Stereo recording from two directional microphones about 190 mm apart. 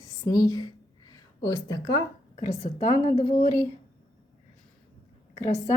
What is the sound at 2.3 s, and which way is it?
Speech, 35° left (ahead or behind).